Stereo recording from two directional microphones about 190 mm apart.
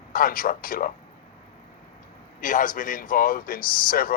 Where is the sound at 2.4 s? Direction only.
45° left (ahead or behind).